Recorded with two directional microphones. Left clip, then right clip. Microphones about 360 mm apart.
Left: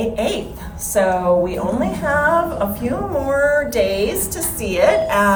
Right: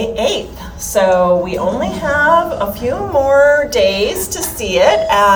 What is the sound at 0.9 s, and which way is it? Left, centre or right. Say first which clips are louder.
A woman's voice: right 4 dB; centre.